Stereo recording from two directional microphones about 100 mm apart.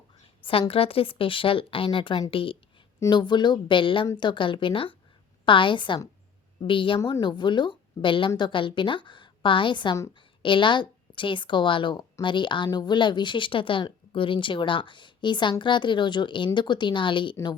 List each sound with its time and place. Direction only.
0.7 s speech: 70° left (ahead or behind)
2.3 s a sound: 60° left (ahead or behind)
3.1 s a woman's voice: 50° left (ahead or behind)